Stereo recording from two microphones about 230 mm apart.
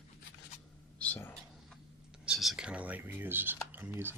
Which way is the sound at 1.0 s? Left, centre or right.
Centre.